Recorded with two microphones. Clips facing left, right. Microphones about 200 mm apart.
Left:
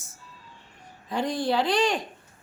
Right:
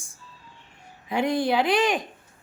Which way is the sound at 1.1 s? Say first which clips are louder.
Right 3 dB; 15° right (ahead or behind).